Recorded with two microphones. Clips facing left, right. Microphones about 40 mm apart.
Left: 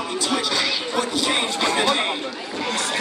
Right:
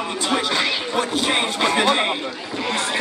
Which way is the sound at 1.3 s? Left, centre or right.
Right.